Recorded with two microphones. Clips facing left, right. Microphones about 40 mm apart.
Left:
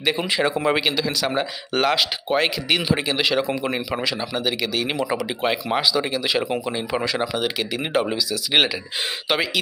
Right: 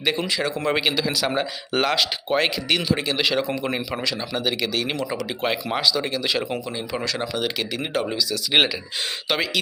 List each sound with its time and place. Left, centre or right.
0.0 s speech: centre
0.3 s speech: left
0.8 s speech: centre
6.7 s speech: left